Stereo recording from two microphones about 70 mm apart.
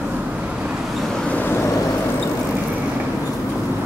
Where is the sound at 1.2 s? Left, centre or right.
Left.